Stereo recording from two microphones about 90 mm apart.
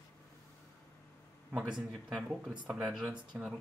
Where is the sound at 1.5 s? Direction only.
5° right (ahead or behind).